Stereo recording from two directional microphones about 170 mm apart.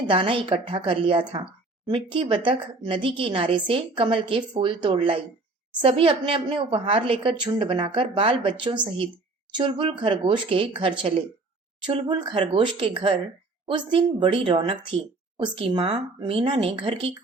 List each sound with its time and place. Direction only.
0.1 s a woman's voice: 30° right (ahead or behind)